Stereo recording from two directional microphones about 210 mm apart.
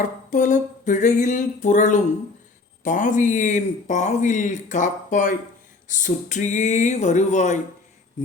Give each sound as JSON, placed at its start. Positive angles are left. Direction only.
{"t": 0.0, "sound": "a man's voice", "side_deg": 40}